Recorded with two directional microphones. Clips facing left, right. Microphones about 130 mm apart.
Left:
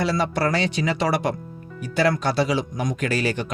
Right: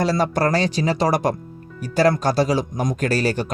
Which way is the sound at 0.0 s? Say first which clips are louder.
Right 3 dB; 40° right (ahead or behind).